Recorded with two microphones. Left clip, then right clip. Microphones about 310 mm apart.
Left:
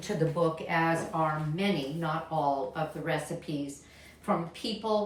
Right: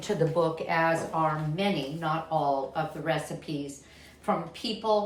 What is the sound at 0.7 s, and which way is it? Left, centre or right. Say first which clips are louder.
A woman's voice: right 3 dB; centre.